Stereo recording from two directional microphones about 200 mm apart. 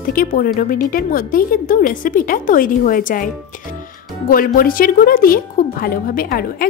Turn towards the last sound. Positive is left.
turn(degrees=45)  # may be behind; listen again after turning